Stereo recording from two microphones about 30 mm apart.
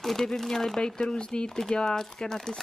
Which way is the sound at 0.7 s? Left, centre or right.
Left.